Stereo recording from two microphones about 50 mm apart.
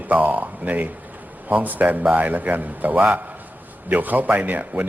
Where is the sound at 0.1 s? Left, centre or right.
Right.